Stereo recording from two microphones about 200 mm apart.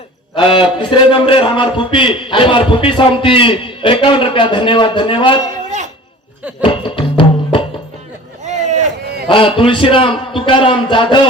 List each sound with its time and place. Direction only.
0.3 s a man's voice: 25° left (ahead or behind)
6.6 s music: 25° left (ahead or behind)
8.4 s boat: 35° right (ahead or behind)
9.3 s a man's voice: 25° left (ahead or behind)